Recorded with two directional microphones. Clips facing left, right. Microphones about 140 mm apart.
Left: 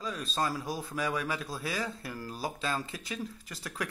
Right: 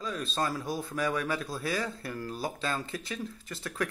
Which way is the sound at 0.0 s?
5° left (ahead or behind).